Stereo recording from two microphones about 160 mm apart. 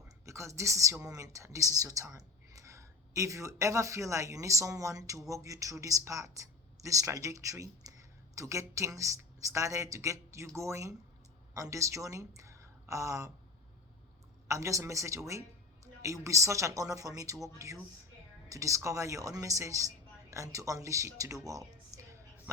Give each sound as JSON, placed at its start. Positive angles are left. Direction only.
{"t": 0.3, "sound": "a woman's voice", "side_deg": -20}
{"t": 12.4, "sound": "a sound", "side_deg": -20}
{"t": 14.4, "sound": "a woman's voice", "side_deg": -20}